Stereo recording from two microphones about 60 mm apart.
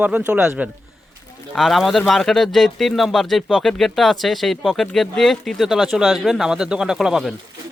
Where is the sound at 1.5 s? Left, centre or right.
Centre.